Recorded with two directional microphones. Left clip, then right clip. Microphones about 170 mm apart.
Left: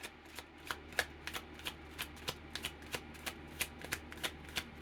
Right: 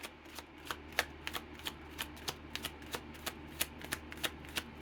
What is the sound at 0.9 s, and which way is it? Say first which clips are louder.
Shuffling cards: right 2 dB; 20° right (ahead or behind).